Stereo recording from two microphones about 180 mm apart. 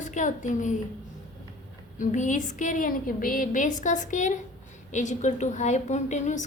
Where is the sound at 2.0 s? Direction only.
45° left (ahead or behind).